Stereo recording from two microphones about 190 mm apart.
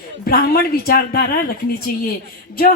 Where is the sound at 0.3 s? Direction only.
55° left (ahead or behind).